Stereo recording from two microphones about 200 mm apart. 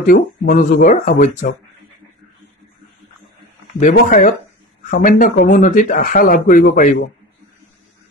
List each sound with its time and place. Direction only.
0.0 s speech: 40° left (ahead or behind)
3.9 s speech: 50° left (ahead or behind)